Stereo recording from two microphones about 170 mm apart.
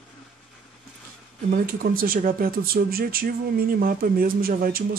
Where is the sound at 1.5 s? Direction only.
60° right (ahead or behind).